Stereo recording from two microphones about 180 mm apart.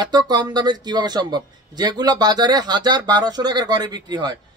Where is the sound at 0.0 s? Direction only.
25° right (ahead or behind).